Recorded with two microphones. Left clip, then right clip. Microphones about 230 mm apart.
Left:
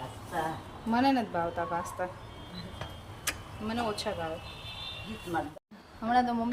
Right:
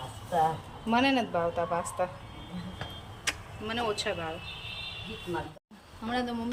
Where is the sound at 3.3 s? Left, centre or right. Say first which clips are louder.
Right 2 dB; centre.